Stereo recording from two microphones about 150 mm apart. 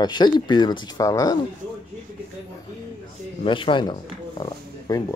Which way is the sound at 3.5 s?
35° left (ahead or behind).